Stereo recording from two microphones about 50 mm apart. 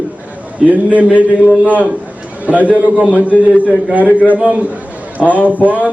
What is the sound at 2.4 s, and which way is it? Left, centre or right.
A man's voice, right.